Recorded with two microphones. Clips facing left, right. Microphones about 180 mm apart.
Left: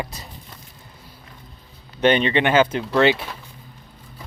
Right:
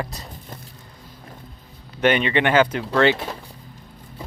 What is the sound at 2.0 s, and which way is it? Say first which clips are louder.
Speech: left 1 dB; 30° left (ahead or behind).